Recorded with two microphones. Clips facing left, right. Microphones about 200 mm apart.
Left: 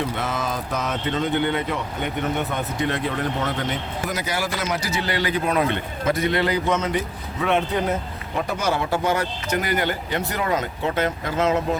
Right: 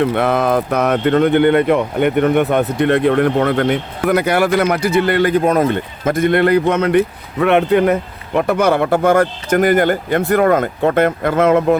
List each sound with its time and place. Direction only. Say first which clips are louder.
0.0 s speech: right 11 dB; 60° right (ahead or behind)